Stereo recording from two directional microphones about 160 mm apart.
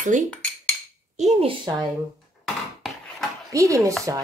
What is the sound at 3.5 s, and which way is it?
Speech, 20° right (ahead or behind).